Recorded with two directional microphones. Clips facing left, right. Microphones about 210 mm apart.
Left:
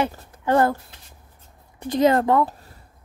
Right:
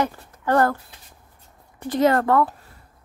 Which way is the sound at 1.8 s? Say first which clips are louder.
Left 1 dB; 15° left (ahead or behind).